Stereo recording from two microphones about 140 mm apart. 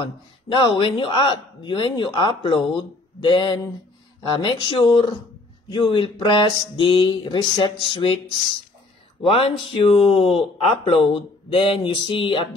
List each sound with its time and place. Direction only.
0.0 s speech: 35° left (ahead or behind)
9.2 s speech: 40° left (ahead or behind)